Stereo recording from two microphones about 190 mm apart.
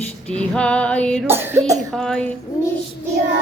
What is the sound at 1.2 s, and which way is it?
Speech, 10° right (ahead or behind).